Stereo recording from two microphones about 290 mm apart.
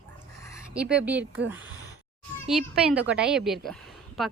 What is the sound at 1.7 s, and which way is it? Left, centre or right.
Sigh, centre.